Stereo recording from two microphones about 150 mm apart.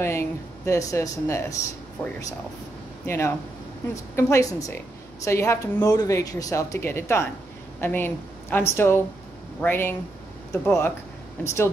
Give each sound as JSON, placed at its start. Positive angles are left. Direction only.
{"t": 0.0, "sound": "a woman's voice", "side_deg": 15}